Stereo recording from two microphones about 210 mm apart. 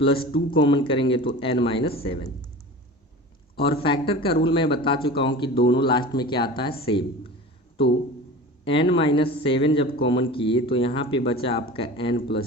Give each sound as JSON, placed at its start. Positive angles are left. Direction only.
{"t": 0.0, "sound": "speech", "side_deg": 25}
{"t": 3.6, "sound": "speech", "side_deg": 25}
{"t": 8.6, "sound": "speech", "side_deg": 25}